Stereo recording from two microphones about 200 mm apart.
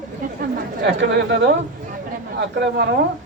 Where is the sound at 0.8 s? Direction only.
60° right (ahead or behind).